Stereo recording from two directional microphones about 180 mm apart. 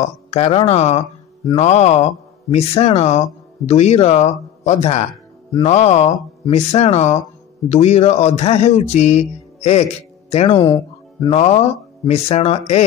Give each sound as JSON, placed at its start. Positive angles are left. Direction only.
{"t": 0.0, "sound": "speech", "side_deg": 35}
{"t": 10.7, "sound": "music", "side_deg": 25}
{"t": 11.3, "sound": "speech", "side_deg": 35}